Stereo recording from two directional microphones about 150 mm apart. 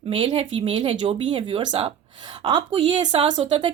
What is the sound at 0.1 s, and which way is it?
A woman's voice, 40° right (ahead or behind).